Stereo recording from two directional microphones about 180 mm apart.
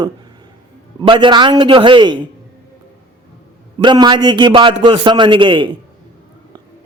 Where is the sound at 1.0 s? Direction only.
30° right (ahead or behind).